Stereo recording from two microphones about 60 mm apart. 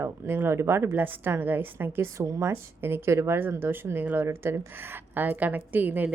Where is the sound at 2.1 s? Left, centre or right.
Right.